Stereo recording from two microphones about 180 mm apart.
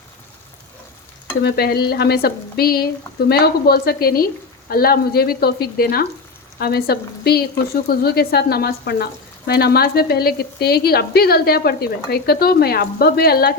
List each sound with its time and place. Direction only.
1.4 s speech: 65° left (ahead or behind)